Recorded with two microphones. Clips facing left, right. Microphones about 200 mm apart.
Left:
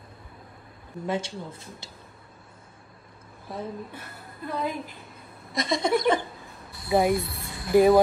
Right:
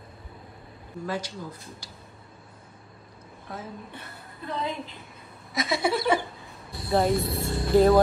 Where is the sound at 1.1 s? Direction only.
25° left (ahead or behind).